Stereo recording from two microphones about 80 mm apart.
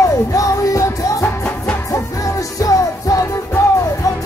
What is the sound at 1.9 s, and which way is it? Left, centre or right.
Music, left.